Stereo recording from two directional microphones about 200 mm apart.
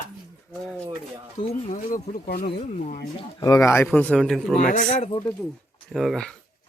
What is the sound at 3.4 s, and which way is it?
Speech, 15° left (ahead or behind).